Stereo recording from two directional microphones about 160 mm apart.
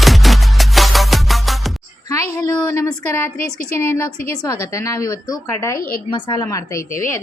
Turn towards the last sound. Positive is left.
turn(degrees=20)  # may be behind; listen again after turning